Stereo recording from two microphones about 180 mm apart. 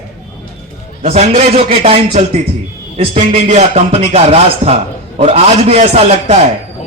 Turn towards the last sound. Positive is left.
turn(degrees=-35)  # may be behind; listen again after turning